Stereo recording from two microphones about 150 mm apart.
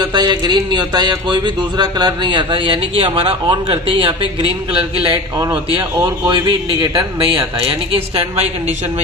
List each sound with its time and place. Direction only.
0.0 s speech: 30° right (ahead or behind)
7.9 s a woman's voice: 40° right (ahead or behind)